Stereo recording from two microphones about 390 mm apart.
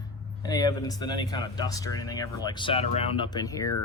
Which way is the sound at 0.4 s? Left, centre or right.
Centre.